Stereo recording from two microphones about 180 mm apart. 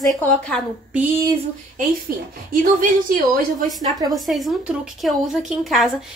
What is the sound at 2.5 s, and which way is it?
Speech, 50° right (ahead or behind).